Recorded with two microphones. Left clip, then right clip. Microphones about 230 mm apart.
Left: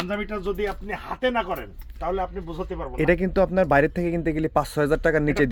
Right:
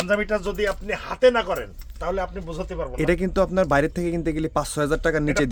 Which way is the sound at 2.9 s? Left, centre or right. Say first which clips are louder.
Left 2 dB; centre.